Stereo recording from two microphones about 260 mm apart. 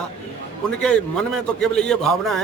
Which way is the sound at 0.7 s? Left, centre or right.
Centre.